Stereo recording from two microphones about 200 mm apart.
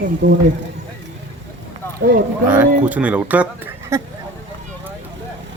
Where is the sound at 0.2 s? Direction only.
65° right (ahead or behind).